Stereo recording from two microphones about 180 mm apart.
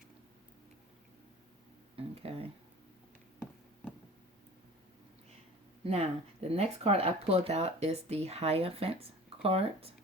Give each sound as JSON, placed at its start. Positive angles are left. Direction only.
{"t": 2.0, "sound": "speech", "side_deg": -30}
{"t": 5.8, "sound": "speech", "side_deg": -35}